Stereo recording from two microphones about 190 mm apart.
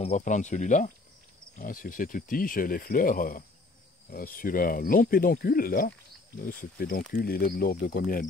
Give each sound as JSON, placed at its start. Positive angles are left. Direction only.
{"t": 0.0, "sound": "speech", "side_deg": 40}